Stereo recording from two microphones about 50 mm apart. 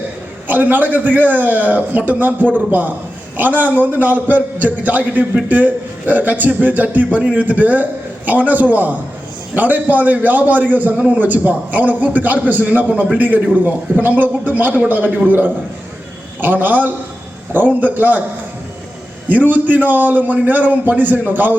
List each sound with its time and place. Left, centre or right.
0.4 s a man's voice: right
19.3 s a man's voice: right